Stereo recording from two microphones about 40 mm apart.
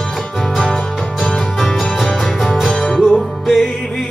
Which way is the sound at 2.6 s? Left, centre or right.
Centre.